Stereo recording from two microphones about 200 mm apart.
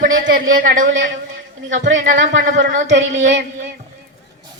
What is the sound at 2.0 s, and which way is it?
Speech, 40° right (ahead or behind).